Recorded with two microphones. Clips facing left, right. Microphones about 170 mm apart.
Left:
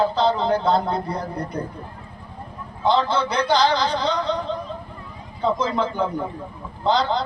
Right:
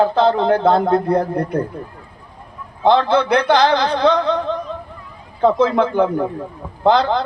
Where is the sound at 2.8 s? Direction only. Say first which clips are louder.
Right 6 dB; 60° right (ahead or behind).